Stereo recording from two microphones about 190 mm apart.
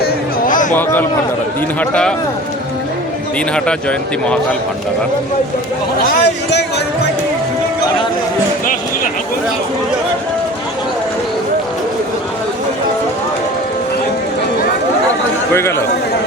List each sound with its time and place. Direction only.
0.0 s a sound: 45° left (ahead or behind)
0.7 s a man's voice: 10° left (ahead or behind)
3.5 s speech: 5° left (ahead or behind)
6.1 s speech: 60° left (ahead or behind)